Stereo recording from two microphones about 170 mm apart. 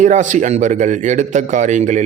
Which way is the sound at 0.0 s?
45° right (ahead or behind).